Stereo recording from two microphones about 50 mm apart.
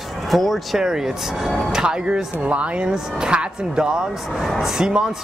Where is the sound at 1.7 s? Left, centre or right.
Centre.